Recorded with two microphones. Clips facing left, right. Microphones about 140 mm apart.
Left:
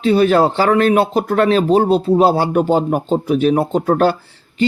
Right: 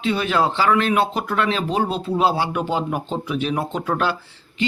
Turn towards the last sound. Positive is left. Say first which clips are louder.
# left 8 dB
turn(degrees=45)  # may be behind; listen again after turning